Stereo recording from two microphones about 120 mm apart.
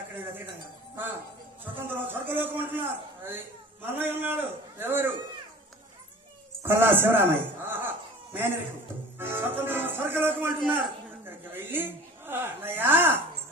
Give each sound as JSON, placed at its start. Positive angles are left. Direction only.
{"t": 1.6, "sound": "a man's voice", "side_deg": -15}
{"t": 6.6, "sound": "a man's voice", "side_deg": -20}